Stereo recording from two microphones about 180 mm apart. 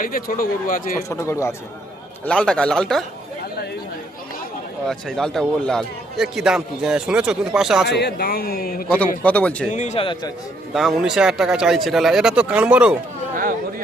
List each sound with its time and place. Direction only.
0.0 s speech: 50° left (ahead or behind)
1.1 s speech: 15° left (ahead or behind)
2.2 s a man's voice: 5° left (ahead or behind)
4.9 s a man's voice: centre (ahead or behind)
7.9 s a man's voice: 65° left (ahead or behind)
9.2 s speech: 10° left (ahead or behind)
9.7 s speech: 40° left (ahead or behind)
10.8 s a man's voice: centre (ahead or behind)
13.3 s chatter: 50° right (ahead or behind)